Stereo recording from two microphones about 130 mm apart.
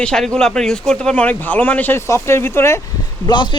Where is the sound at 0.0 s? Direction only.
5° left (ahead or behind).